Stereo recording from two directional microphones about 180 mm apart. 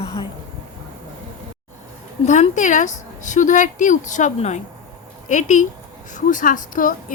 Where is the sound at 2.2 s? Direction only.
40° left (ahead or behind).